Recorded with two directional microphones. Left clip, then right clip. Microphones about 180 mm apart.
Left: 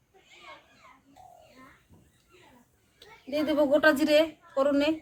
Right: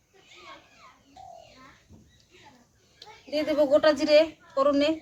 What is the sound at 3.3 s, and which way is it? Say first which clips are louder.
A woman's voice: right 2 dB; 50° left (ahead or behind).